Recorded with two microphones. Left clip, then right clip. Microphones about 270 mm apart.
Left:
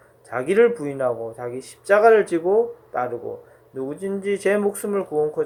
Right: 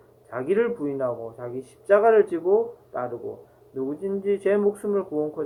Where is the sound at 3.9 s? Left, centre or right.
Left.